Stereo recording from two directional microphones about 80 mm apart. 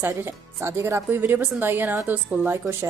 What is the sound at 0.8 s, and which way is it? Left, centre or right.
A woman's voice, right.